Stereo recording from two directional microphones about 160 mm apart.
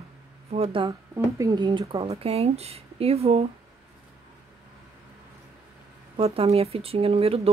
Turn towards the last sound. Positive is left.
turn(degrees=-40)  # may be behind; listen again after turning